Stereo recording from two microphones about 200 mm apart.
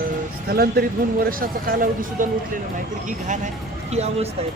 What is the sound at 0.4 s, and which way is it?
Speech, 50° right (ahead or behind).